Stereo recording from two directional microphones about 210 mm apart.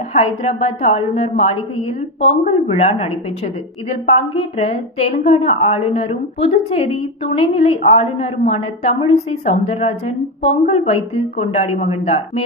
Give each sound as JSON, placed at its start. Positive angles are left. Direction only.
{"t": 0.1, "sound": "a woman's voice", "side_deg": 30}